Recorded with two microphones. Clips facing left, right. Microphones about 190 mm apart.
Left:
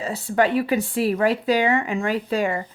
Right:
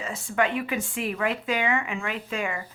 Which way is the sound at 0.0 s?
35° left (ahead or behind).